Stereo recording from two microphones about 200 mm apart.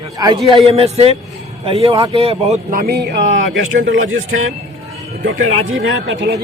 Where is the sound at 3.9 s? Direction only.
85° right; by 6.4 s 60° right (ahead or behind).